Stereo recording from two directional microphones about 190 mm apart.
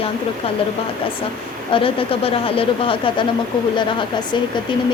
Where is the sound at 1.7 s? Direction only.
30° left (ahead or behind).